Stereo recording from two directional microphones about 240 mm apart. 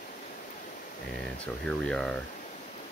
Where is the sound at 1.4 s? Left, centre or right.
Centre.